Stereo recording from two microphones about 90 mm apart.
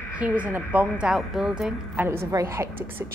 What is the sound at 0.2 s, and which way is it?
A woman's voice, 15° right (ahead or behind).